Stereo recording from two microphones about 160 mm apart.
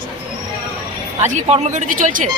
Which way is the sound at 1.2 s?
45° right (ahead or behind).